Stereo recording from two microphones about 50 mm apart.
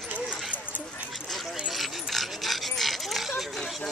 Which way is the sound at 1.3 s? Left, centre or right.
Centre.